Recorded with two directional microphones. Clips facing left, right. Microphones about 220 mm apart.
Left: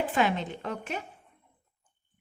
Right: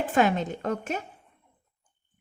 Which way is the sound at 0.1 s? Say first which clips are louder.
Right 4 dB; 45° right (ahead or behind).